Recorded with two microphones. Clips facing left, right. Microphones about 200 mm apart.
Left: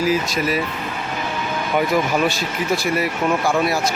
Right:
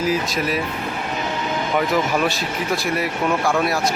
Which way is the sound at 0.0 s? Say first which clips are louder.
Left 2 dB; centre (ahead or behind).